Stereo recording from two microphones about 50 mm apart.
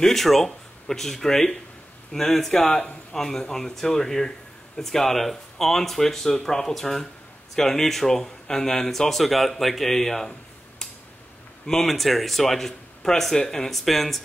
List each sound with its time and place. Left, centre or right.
0.0 s speech: centre
11.6 s speech: centre